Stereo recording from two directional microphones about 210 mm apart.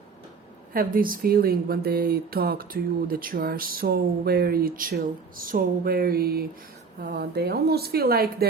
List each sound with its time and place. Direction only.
0.7 s speech: 45° right (ahead or behind)